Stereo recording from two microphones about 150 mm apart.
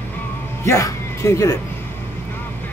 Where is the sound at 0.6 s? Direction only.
20° left (ahead or behind).